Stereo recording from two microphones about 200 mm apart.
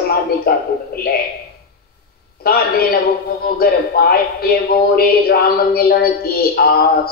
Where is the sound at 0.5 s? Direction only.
50° left (ahead or behind).